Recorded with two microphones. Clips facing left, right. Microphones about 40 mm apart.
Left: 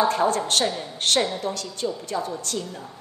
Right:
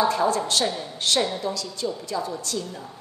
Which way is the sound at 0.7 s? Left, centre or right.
Centre.